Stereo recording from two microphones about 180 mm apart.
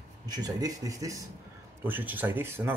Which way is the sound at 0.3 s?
20° right (ahead or behind).